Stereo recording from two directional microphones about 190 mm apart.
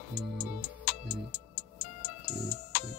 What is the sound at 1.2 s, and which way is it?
Music, 40° left (ahead or behind).